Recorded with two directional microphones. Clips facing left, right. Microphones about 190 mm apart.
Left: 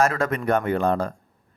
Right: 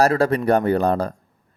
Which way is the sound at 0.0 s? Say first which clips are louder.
Right 5 dB; 35° right (ahead or behind).